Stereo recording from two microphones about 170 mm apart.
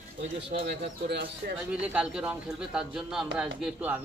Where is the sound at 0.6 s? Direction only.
65° right (ahead or behind).